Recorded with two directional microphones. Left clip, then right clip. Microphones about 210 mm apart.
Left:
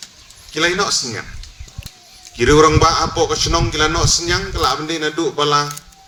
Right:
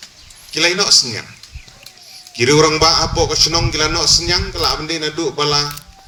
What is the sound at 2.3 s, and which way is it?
A man's voice, 40° left (ahead or behind).